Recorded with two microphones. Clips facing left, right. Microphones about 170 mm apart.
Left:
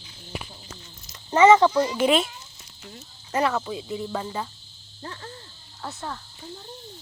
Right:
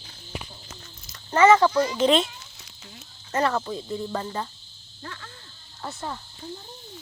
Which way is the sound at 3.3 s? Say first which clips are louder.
Even; 5° left (ahead or behind).